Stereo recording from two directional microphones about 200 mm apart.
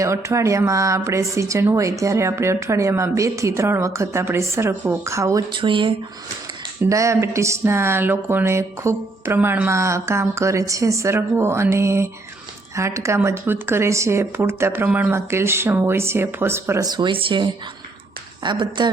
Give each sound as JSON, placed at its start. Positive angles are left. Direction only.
{"t": 0.0, "sound": "speech", "side_deg": -15}